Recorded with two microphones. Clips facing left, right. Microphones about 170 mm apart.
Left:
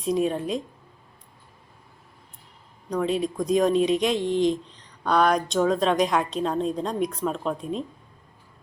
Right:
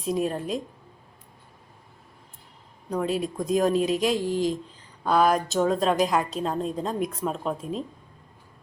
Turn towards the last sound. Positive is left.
turn(degrees=0)  # may be behind; listen again after turning